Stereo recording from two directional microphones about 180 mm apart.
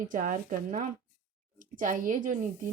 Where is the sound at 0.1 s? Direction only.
50° right (ahead or behind).